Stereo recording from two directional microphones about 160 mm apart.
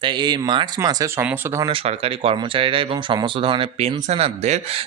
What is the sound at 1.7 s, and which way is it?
Speech, 35° right (ahead or behind).